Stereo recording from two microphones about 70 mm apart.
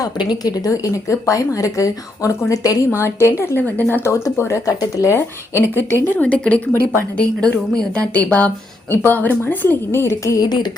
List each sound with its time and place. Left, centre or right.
0.0 s speech: left
0.7 s speech: left
2.9 s a woman's voice: left
4.0 s speech: left
4.8 s speech: left
5.1 s a woman's voice: left; by 8.0 s centre
8.0 s a woman's voice: left
10.3 s speech: left